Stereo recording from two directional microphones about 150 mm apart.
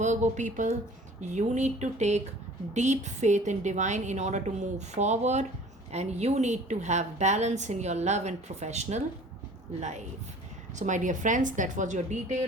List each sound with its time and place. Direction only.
0.0 s a woman's voice: 50° right (ahead or behind)
10.8 s speech: 55° right (ahead or behind)